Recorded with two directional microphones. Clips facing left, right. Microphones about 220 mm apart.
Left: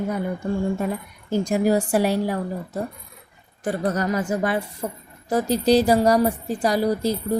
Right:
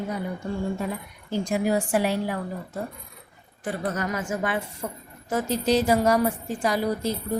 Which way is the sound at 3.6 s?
40° left (ahead or behind).